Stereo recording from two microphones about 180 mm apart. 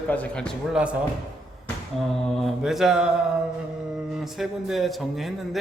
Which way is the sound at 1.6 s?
Centre (ahead or behind).